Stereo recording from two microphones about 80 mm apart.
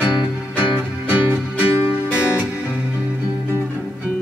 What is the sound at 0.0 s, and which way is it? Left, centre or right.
Music, centre.